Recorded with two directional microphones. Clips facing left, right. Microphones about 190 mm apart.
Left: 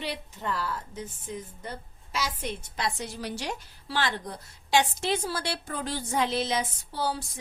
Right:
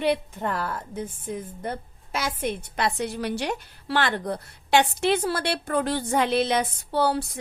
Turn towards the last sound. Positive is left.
turn(degrees=-65)  # may be behind; listen again after turning